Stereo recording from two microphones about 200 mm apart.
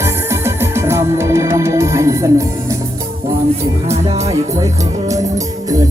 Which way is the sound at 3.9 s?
35° right (ahead or behind).